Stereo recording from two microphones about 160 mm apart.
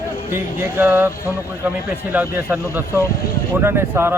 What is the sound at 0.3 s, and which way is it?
Speech, 15° right (ahead or behind).